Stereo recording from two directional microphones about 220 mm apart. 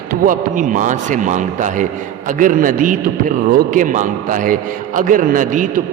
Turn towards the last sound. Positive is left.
turn(degrees=-35)  # may be behind; listen again after turning